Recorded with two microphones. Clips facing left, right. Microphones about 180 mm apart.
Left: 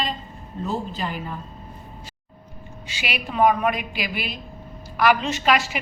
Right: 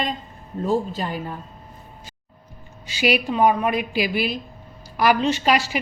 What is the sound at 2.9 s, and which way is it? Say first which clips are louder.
A woman's voice: right 10 dB; 40° right (ahead or behind).